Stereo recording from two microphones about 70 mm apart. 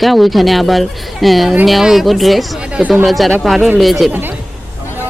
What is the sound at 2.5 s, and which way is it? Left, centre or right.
Speech, centre.